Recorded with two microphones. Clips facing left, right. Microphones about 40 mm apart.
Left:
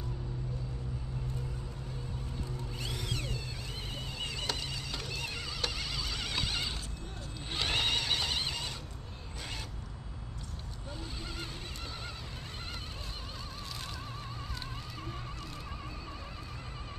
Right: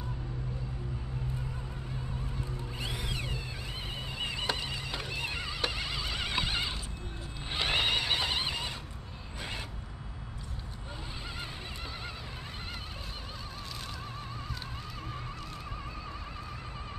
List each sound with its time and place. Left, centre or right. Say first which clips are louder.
2.8 s vehicle: right 2 dB; centre
4.2 s neigh: right 4 dB; centre